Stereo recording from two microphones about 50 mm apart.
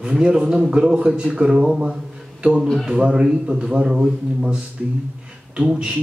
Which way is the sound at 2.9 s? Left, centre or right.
Centre.